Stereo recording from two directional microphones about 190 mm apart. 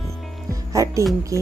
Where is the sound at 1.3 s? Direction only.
15° right (ahead or behind).